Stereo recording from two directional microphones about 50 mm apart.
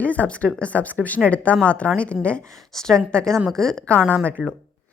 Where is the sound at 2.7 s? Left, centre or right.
Centre.